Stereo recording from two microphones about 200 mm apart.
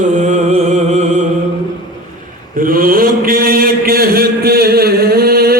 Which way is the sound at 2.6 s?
45° right (ahead or behind).